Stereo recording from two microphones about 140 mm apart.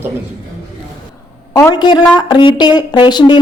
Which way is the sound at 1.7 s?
30° left (ahead or behind).